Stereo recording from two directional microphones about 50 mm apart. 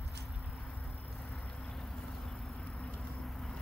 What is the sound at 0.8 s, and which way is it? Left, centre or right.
Vehicle, centre.